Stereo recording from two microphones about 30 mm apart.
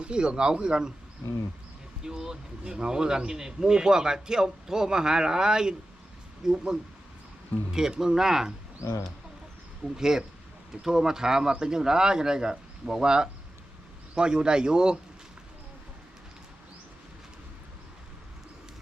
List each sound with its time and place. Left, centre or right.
0.0 s speech: right
2.0 s speech: centre
9.9 s speech: centre